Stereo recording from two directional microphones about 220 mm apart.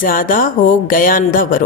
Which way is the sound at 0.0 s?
40° left (ahead or behind).